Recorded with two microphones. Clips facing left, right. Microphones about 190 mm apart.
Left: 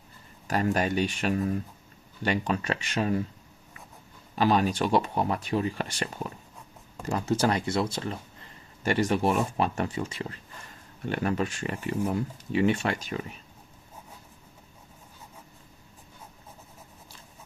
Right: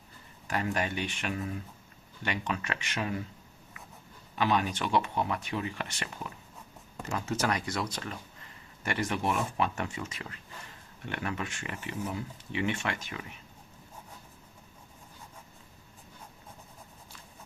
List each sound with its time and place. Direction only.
0.4 s speech: 40° left (ahead or behind)
4.4 s speech: 35° left (ahead or behind)